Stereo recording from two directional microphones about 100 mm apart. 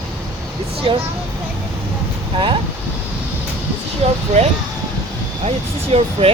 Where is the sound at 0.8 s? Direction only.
65° right (ahead or behind).